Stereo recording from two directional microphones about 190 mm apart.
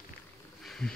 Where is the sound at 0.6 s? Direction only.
Centre (ahead or behind).